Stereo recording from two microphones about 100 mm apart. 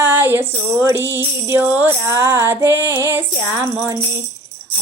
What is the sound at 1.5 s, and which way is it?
Music, 20° right (ahead or behind).